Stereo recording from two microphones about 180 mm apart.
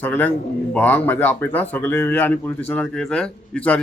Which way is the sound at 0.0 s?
10° left (ahead or behind).